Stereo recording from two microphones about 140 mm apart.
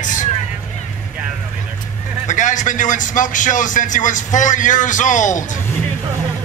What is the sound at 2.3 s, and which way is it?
Speech, 65° left (ahead or behind).